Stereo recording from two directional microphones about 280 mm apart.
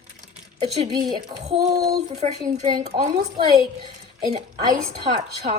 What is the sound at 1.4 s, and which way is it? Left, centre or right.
A woman's voice, right.